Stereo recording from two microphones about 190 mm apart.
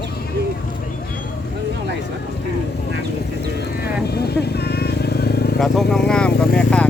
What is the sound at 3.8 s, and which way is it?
Vehicle, 55° left (ahead or behind).